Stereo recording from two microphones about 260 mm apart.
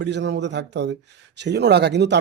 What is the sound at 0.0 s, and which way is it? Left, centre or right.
Speech, right.